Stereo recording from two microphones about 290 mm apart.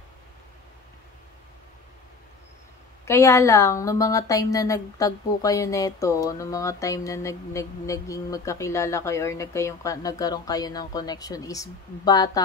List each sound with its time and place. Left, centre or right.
3.1 s speech: centre